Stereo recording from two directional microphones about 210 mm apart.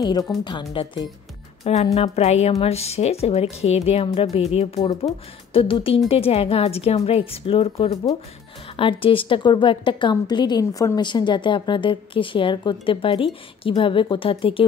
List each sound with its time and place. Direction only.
0.0 s a woman's voice: 15° left (ahead or behind)